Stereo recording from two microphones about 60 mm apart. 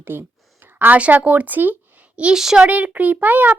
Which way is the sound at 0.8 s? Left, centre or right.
Right.